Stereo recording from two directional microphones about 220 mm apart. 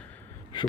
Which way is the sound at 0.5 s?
20° left (ahead or behind).